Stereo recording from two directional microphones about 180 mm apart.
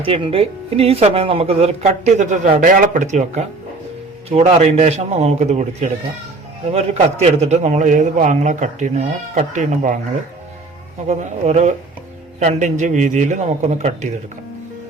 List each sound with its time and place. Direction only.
0.0 s speech: 30° right (ahead or behind)
11.1 s speech: 40° right (ahead or behind)